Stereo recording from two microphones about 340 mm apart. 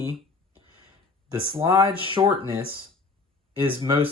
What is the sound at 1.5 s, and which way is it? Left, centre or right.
Speech, centre.